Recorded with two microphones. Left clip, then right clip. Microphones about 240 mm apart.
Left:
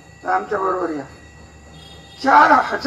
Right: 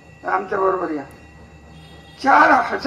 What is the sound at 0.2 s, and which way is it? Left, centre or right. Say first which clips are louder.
Speech: even; right.